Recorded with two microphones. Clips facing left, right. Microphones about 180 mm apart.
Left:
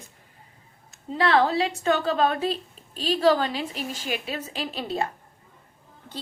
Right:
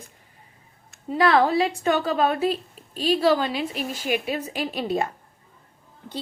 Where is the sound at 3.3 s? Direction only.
40° left (ahead or behind).